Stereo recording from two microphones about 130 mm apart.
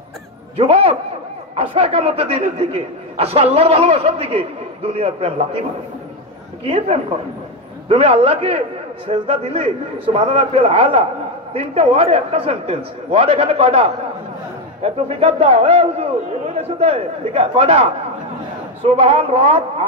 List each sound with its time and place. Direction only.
0.6 s speech: 50° right (ahead or behind)
7.9 s speech: 45° right (ahead or behind)